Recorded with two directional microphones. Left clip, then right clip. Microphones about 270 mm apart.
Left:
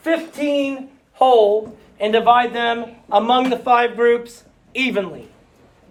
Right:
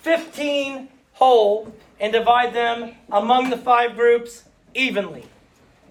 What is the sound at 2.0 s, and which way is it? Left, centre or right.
A man's voice, centre.